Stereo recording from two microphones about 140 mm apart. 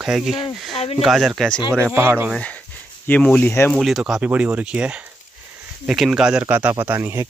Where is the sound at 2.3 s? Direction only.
10° left (ahead or behind).